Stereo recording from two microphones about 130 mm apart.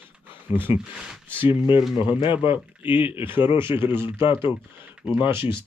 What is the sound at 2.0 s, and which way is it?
Speech, 40° left (ahead or behind).